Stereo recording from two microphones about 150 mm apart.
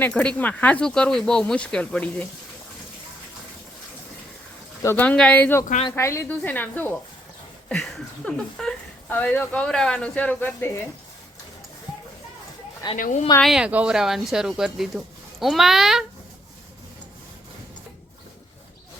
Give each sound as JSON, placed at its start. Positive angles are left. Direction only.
{"t": 0.0, "sound": "speech", "side_deg": 5}
{"t": 4.8, "sound": "speech", "side_deg": 15}
{"t": 13.0, "sound": "speech", "side_deg": 55}
{"t": 13.4, "sound": "speech", "side_deg": -5}